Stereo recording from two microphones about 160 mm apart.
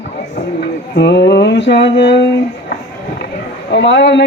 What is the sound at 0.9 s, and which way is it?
Music, 90° left.